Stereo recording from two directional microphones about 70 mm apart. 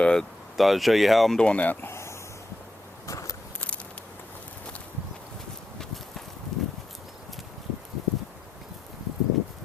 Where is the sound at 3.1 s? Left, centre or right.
Left.